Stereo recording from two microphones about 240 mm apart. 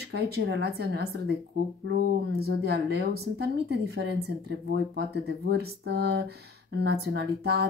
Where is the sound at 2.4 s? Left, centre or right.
Right.